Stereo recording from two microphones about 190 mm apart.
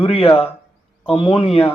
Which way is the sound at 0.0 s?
30° left (ahead or behind).